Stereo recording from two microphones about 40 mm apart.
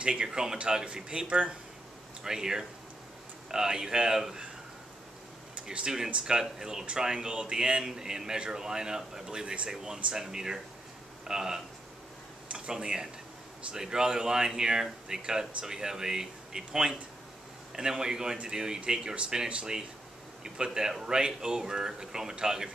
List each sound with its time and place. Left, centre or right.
0.0 s speech: right
1.2 s speech: right
2.2 s speech: centre
5.6 s speech: centre
12.7 s speech: centre